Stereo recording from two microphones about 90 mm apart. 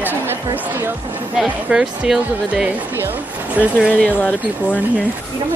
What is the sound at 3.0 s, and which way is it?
Speech, 20° right (ahead or behind).